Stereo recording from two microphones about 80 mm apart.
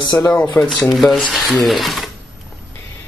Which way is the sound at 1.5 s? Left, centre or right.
Centre.